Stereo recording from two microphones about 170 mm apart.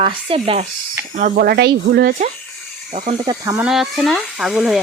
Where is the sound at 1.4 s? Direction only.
70° right (ahead or behind).